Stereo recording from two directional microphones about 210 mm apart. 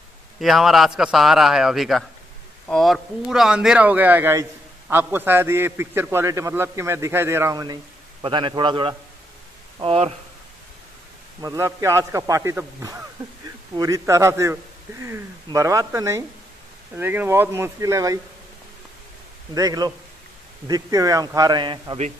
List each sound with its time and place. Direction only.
0.4 s a man's voice: centre (ahead or behind); by 10.1 s 25° right (ahead or behind)
11.4 s a man's voice: 15° right (ahead or behind)
19.5 s a man's voice: 15° right (ahead or behind)